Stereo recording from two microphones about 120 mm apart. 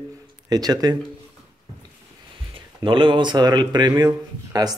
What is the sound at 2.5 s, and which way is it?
Speech, 45° right (ahead or behind).